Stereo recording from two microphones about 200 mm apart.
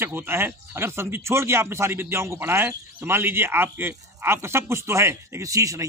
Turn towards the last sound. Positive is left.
turn(degrees=-15)  # may be behind; listen again after turning